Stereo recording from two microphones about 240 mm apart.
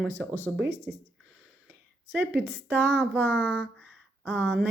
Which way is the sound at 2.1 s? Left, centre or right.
Centre.